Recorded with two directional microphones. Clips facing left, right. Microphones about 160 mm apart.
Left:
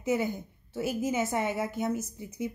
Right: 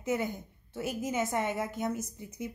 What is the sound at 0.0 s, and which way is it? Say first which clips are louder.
A woman's voice: left 3 dB; 5° left (ahead or behind).